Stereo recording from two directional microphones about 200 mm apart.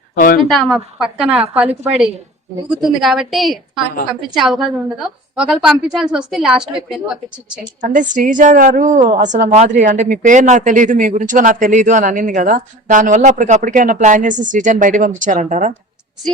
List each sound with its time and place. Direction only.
0.4 s a woman's voice: centre (ahead or behind)
7.6 s a woman's voice: 40° right (ahead or behind)